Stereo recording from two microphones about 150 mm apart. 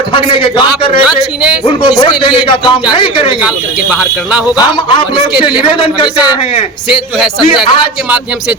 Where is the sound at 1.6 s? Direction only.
30° left (ahead or behind).